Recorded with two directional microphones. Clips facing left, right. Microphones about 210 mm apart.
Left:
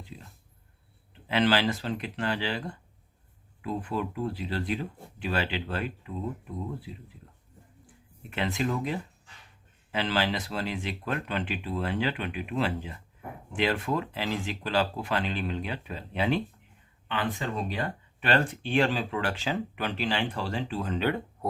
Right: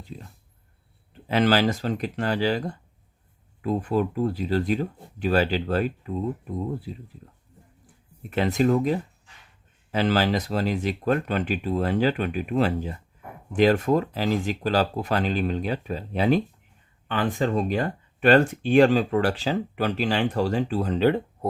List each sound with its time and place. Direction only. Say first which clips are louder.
0.1 s a sound: right 7 dB; 40° right (ahead or behind)
1.3 s speech: right 4 dB; 40° right (ahead or behind)
8.3 s speech: right 8 dB; 40° right (ahead or behind)